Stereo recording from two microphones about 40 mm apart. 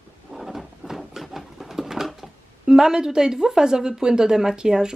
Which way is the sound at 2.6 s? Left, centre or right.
Centre.